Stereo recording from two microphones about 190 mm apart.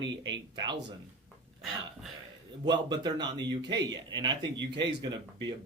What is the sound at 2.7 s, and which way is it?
Speech, 25° right (ahead or behind).